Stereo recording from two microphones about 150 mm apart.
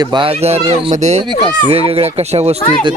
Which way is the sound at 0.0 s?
30° right (ahead or behind).